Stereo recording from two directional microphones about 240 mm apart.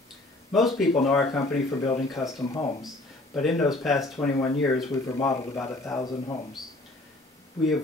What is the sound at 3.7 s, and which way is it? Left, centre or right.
Speech, centre.